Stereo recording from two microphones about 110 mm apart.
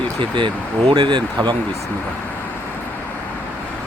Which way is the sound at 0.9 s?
45° right (ahead or behind).